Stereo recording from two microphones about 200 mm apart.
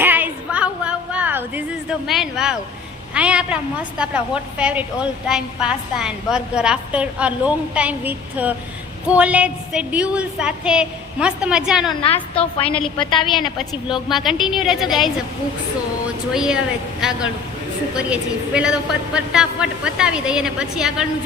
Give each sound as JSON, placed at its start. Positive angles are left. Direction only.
{"t": 0.0, "sound": "a sound", "side_deg": -10}
{"t": 3.2, "sound": "a woman's voice", "side_deg": -5}
{"t": 13.0, "sound": "a woman's voice", "side_deg": 25}
{"t": 14.1, "sound": "a woman's voice", "side_deg": 0}
{"t": 16.3, "sound": "a woman's voice", "side_deg": -5}